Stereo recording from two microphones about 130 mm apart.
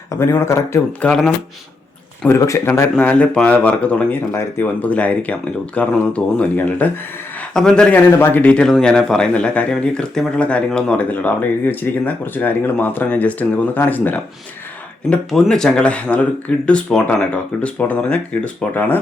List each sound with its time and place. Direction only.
0.2 s speech: 20° left (ahead or behind)
1.0 s speech: 5° left (ahead or behind)
2.3 s speech: 20° left (ahead or behind)
15.1 s speech: 5° left (ahead or behind)